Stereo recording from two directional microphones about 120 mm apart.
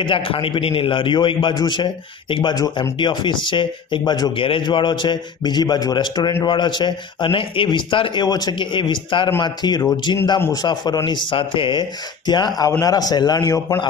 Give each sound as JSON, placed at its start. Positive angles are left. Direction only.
{"t": 0.0, "sound": "a man's voice", "side_deg": 45}